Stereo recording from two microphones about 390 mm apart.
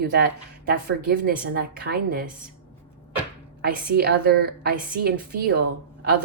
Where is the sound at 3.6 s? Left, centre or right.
Right.